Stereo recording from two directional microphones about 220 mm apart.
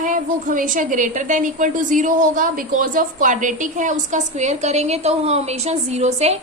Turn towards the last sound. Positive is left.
turn(degrees=-30)  # may be behind; listen again after turning